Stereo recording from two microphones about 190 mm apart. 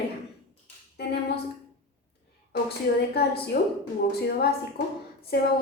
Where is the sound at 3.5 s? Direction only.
55° left (ahead or behind).